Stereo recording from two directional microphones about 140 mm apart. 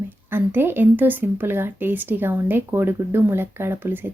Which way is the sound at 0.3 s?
15° right (ahead or behind).